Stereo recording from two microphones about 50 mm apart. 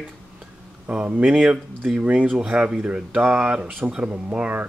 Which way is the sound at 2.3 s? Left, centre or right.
Centre.